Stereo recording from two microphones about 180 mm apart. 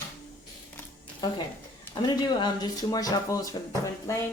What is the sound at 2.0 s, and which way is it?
Speech, 25° left (ahead or behind).